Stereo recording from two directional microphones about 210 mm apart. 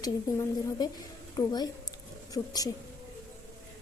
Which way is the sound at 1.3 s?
20° left (ahead or behind).